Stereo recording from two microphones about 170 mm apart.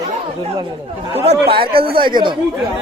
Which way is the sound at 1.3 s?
30° right (ahead or behind).